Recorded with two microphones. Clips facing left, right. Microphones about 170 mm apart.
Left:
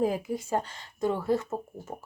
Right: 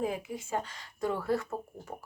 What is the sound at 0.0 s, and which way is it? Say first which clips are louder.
Speech: left 6 dB; 35° left (ahead or behind).